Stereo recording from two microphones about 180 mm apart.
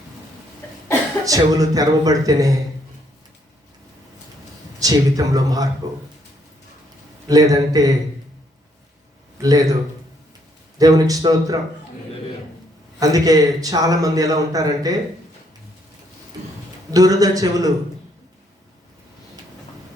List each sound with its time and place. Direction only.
1.2 s a man's voice: 20° right (ahead or behind)
4.8 s a man's voice: 20° right (ahead or behind)
7.3 s a man's voice: 20° right (ahead or behind)
9.4 s a man's voice: 20° right (ahead or behind)
10.8 s a man's voice: 20° right (ahead or behind)
13.0 s a man's voice: 20° right (ahead or behind)
16.9 s a man's voice: 20° right (ahead or behind)